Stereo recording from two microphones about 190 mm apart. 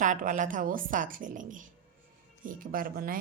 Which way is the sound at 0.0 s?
45° right (ahead or behind).